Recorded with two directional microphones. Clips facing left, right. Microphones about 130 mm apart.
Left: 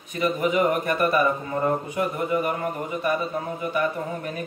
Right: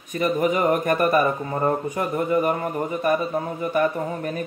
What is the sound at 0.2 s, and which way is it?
Speech, 45° right (ahead or behind).